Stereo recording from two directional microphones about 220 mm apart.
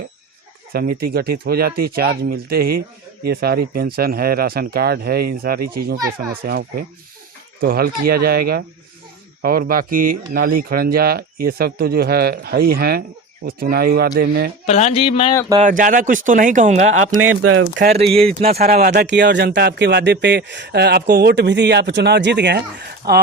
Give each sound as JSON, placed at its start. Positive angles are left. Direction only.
{"t": 0.7, "sound": "speech", "side_deg": -45}
{"t": 14.7, "sound": "speech", "side_deg": 30}
{"t": 15.5, "sound": "speech", "side_deg": -35}
{"t": 17.2, "sound": "speech", "side_deg": -75}
{"t": 17.9, "sound": "speech", "side_deg": -25}
{"t": 18.5, "sound": "speech", "side_deg": -40}
{"t": 19.0, "sound": "speech", "side_deg": -50}